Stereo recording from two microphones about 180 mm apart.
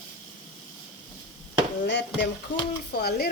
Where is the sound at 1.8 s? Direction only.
80° left.